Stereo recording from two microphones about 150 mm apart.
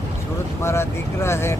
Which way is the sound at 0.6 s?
20° left (ahead or behind).